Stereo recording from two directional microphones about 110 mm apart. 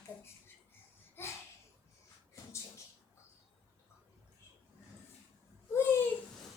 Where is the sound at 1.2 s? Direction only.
20° left (ahead or behind).